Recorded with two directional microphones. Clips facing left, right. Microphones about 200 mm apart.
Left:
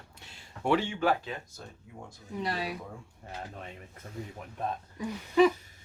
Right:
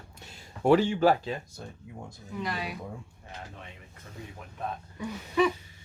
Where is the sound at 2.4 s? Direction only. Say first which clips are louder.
Left 1 dB; 30° left (ahead or behind).